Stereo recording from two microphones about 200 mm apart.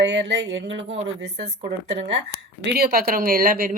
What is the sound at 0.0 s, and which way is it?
Speech, 60° right (ahead or behind).